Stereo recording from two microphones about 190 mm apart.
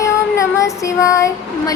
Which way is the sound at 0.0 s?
15° left (ahead or behind).